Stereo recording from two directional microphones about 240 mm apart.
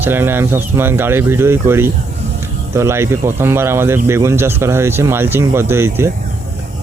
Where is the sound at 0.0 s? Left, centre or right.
Centre.